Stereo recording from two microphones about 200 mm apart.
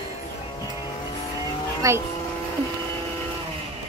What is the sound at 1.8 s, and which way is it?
Speech, 15° right (ahead or behind).